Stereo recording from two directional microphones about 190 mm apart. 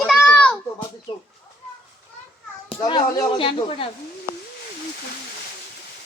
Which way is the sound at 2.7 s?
20° left (ahead or behind).